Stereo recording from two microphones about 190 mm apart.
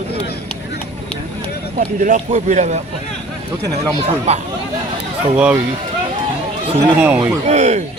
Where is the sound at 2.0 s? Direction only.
45° right (ahead or behind).